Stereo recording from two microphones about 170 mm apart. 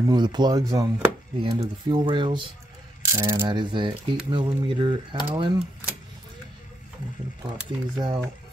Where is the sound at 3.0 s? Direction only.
20° right (ahead or behind).